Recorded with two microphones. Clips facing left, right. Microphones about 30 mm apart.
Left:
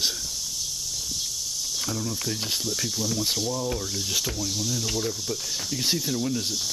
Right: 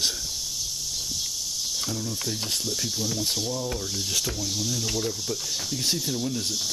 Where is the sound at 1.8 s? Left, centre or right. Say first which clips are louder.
Left 1 dB; centre.